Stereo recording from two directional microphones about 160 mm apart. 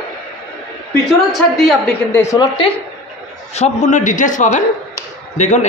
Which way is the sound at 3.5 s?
45° left (ahead or behind).